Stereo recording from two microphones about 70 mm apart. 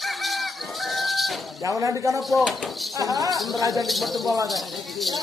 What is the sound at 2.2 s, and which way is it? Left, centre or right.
Speech, centre.